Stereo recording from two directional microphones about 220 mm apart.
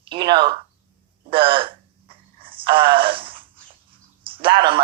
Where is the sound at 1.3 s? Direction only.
25° right (ahead or behind).